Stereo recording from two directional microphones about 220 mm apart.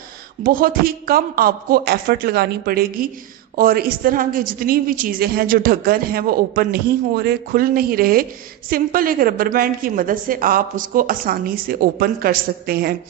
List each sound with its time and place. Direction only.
0.4 s a man's voice: 40° right (ahead or behind)